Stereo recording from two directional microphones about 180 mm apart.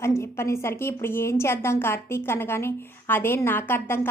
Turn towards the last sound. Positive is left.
turn(degrees=10)  # may be behind; listen again after turning